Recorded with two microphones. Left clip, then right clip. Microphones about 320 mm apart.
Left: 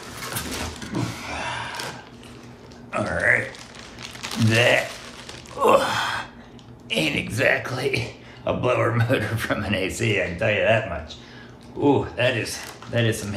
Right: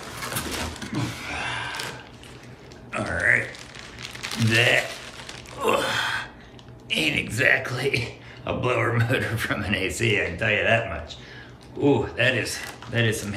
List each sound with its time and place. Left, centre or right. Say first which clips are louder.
0.2 s a sound: even; centre
1.2 s vehicle: even; centre
2.9 s burping: left 1 dB; centre
4.0 s a sound: left 2 dB; centre
4.5 s speech: left 1 dB; centre
5.6 s gasp: left 5 dB; centre
6.9 s speech: even; centre